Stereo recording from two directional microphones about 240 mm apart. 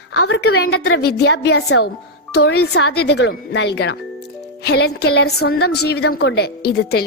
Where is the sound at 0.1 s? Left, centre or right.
Left.